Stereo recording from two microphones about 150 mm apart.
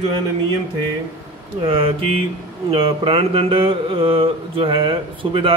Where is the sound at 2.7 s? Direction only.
40° right (ahead or behind).